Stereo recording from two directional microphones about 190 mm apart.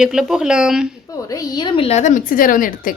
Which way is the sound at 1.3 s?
20° left (ahead or behind).